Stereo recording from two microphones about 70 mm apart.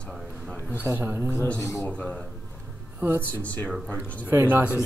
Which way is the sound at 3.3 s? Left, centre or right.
Left.